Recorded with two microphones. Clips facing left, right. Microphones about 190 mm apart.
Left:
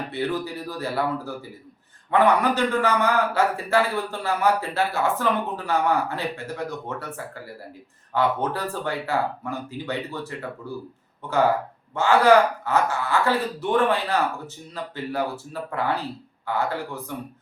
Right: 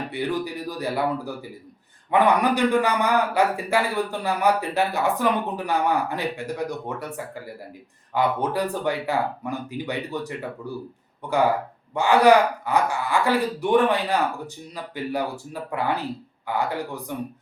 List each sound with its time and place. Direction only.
0.1 s a man's voice: 15° right (ahead or behind)
8.1 s a man's voice: 15° right (ahead or behind)